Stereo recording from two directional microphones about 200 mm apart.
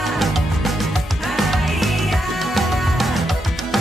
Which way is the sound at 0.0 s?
Centre (ahead or behind).